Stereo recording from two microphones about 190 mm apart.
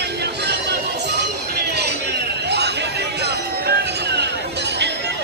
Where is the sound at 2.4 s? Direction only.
60° right (ahead or behind).